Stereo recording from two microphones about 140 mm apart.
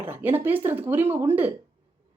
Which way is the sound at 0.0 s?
15° right (ahead or behind).